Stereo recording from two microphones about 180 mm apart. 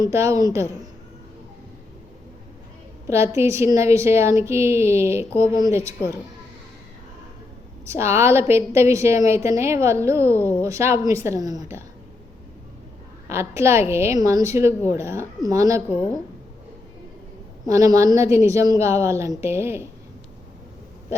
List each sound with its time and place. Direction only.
0.0 s a woman's voice: 15° right (ahead or behind)
3.1 s a woman's voice: 15° right (ahead or behind)
7.9 s a woman's voice: 15° right (ahead or behind)
13.2 s a woman's voice: 15° right (ahead or behind)
17.7 s a woman's voice: 20° right (ahead or behind)